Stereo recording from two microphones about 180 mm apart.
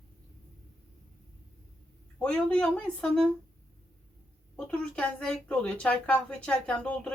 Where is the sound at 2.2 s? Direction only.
5° left (ahead or behind).